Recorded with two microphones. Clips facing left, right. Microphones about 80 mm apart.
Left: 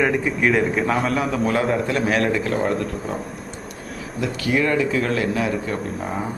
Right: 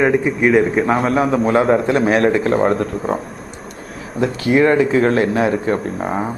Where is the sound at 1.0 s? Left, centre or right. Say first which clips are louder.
Right 6 dB; right.